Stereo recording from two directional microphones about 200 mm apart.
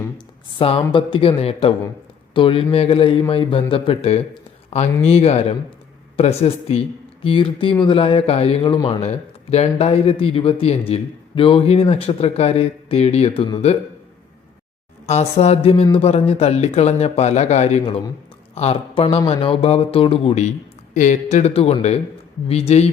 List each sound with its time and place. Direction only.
0.6 s speech: 25° left (ahead or behind)
15.0 s speech: 35° left (ahead or behind)